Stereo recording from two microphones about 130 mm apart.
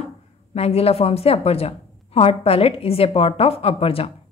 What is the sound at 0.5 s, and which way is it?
A woman's voice, 50° left (ahead or behind).